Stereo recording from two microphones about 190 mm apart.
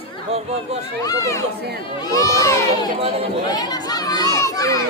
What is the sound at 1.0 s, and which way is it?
Speech, 20° left (ahead or behind).